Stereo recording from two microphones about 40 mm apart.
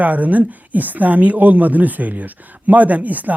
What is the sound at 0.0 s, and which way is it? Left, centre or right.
Speech, right.